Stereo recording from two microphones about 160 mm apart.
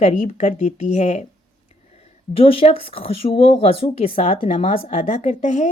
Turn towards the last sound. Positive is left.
turn(degrees=45)  # may be behind; listen again after turning